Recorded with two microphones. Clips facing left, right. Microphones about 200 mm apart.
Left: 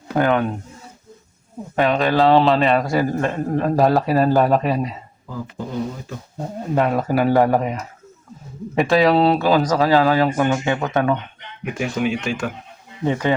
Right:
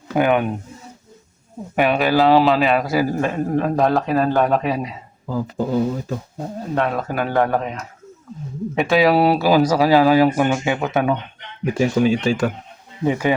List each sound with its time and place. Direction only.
0.2 s speech: 15° right (ahead or behind)
1.7 s a man's voice: 10° right (ahead or behind)
6.4 s speech: 5° left (ahead or behind); by 11.2 s 10° right (ahead or behind)
11.6 s speech: 35° right (ahead or behind)
13.1 s speech: 10° right (ahead or behind)